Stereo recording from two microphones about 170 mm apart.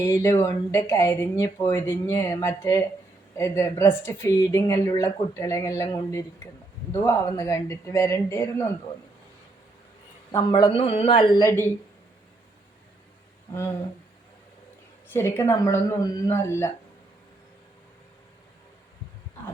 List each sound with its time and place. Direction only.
0.0 s speech: 15° left (ahead or behind)
10.3 s speech: 25° left (ahead or behind)
13.5 s speech: 20° left (ahead or behind)
15.1 s speech: 15° left (ahead or behind)